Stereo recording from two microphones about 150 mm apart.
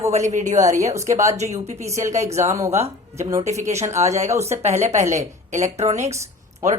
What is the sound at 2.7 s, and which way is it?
Speech, 45° right (ahead or behind).